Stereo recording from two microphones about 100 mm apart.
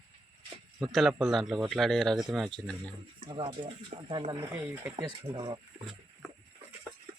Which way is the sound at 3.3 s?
60° right (ahead or behind).